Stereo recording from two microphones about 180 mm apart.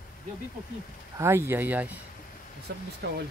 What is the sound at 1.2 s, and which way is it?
Speech, 15° right (ahead or behind).